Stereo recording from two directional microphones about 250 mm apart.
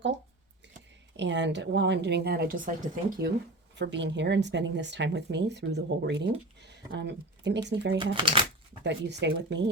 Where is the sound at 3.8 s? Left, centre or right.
Right.